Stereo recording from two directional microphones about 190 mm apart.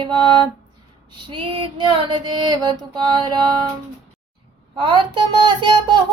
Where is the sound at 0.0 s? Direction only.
25° right (ahead or behind).